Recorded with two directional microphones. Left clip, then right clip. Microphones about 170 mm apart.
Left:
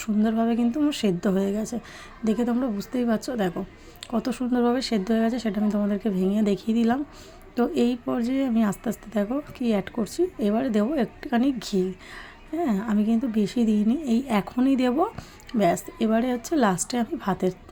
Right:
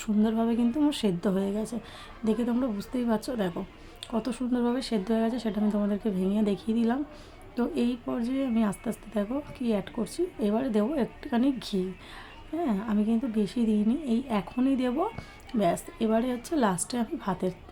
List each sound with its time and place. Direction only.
0.0 s a woman's voice: 10° left (ahead or behind)